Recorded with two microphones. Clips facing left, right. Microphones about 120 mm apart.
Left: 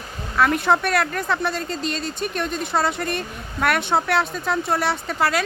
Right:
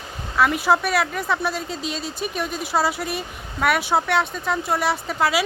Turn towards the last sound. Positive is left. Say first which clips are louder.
# right 1 dB
turn(degrees=0)  # may be behind; listen again after turning